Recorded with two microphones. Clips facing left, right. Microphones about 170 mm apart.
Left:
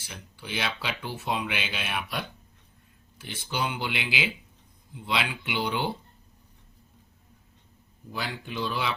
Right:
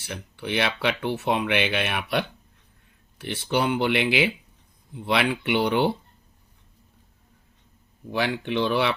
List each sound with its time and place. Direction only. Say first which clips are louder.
0.0 s speech: right 9 dB; 60° right (ahead or behind)
8.1 s speech: right 9 dB; 70° right (ahead or behind)